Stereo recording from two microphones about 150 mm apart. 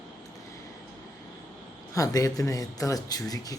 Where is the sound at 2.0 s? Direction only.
25° left (ahead or behind).